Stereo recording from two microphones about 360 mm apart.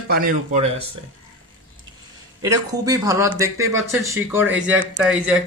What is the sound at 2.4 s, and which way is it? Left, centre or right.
Speech, centre.